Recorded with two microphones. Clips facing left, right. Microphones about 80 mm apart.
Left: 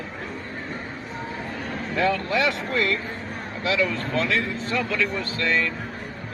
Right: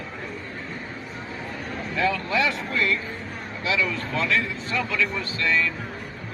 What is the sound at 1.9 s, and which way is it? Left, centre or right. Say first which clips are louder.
Speech: left 1 dB; left.